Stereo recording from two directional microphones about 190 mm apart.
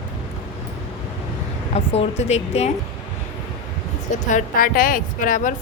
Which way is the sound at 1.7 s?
35° left (ahead or behind).